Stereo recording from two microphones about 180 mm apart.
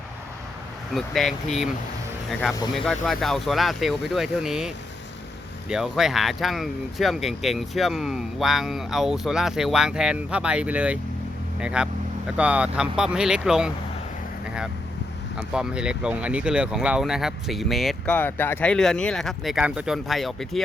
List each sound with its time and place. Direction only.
0.9 s speech: centre (ahead or behind)
2.7 s speech: 5° left (ahead or behind)
15.5 s speech: 5° right (ahead or behind)